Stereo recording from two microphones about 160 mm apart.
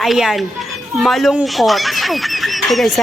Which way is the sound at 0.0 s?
Centre (ahead or behind).